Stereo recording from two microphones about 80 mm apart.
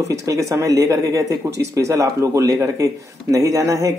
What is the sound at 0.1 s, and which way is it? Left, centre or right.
Speech, right.